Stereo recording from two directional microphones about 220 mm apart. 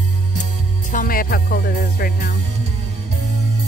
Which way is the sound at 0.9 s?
40° left (ahead or behind).